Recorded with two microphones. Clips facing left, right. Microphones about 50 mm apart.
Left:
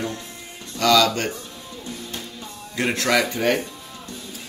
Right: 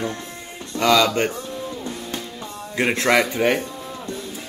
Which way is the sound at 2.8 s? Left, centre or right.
Right.